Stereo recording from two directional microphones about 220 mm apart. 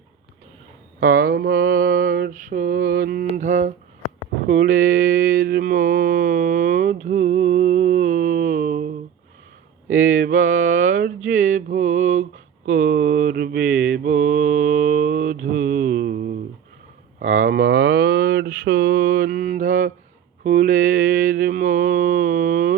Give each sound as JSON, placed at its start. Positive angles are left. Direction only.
{"t": 0.9, "sound": "mantra", "side_deg": -45}
{"t": 4.0, "sound": "a sound", "side_deg": 90}
{"t": 4.4, "sound": "speech", "side_deg": -55}
{"t": 4.7, "sound": "mantra", "side_deg": -40}
{"t": 9.9, "sound": "mantra", "side_deg": -40}
{"t": 17.2, "sound": "speech", "side_deg": -35}
{"t": 20.4, "sound": "mantra", "side_deg": -40}